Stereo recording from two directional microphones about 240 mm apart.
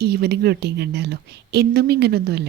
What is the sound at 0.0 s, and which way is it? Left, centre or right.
A woman's voice, right.